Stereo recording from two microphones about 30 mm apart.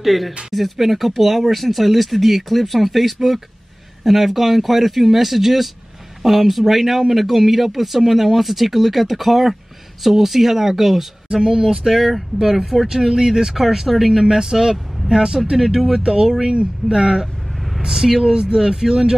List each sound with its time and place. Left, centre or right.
0.0 s speech: centre
11.3 s speech: right
12.8 s speech: centre
14.3 s speech: centre
15.5 s speech: centre